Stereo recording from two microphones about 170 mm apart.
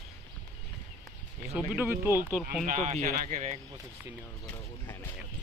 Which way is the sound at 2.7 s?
40° right (ahead or behind).